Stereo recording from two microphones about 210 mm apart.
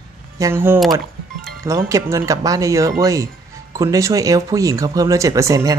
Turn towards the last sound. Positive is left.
turn(degrees=-15)  # may be behind; listen again after turning